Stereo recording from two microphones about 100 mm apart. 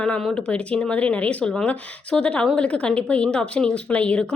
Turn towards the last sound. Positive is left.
turn(degrees=10)  # may be behind; listen again after turning